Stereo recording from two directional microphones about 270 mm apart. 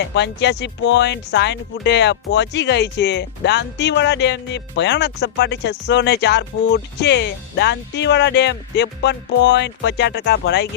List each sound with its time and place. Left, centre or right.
0.1 s speech: left